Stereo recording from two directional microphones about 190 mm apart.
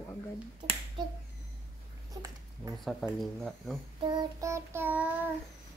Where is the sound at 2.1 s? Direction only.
20° right (ahead or behind).